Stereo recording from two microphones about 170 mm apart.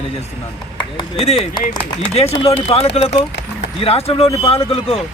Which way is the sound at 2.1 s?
35° left (ahead or behind).